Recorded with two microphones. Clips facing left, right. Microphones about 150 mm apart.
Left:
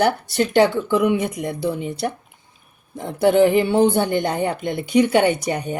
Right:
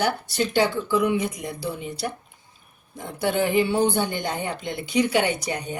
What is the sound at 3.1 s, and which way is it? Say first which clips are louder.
Speech: left 7 dB; 55° left (ahead or behind).